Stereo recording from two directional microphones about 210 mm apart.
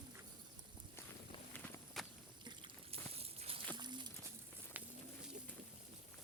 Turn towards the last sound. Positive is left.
turn(degrees=-10)  # may be behind; listen again after turning